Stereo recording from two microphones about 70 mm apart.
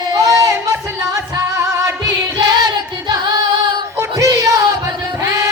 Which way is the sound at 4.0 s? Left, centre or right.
Right.